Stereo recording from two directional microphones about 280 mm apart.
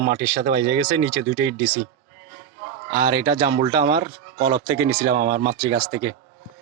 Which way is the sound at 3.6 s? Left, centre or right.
Centre.